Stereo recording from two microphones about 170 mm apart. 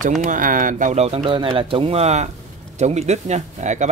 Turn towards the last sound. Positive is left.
turn(degrees=-45)  # may be behind; listen again after turning